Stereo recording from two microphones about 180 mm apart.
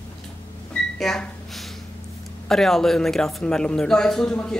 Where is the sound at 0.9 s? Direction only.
Centre (ahead or behind).